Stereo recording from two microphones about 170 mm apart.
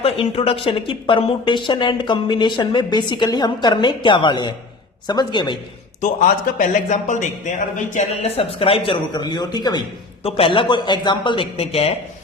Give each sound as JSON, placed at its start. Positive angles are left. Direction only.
{"t": 0.0, "sound": "speech", "side_deg": 35}
{"t": 6.0, "sound": "a man's voice", "side_deg": 50}